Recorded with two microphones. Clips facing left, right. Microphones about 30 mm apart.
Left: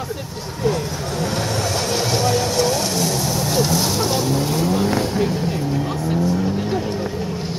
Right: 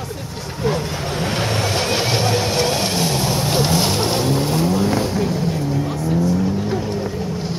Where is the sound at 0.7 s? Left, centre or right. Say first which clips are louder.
Even; right.